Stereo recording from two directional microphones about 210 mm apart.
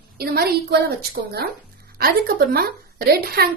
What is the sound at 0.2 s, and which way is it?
A woman's voice, 50° right (ahead or behind).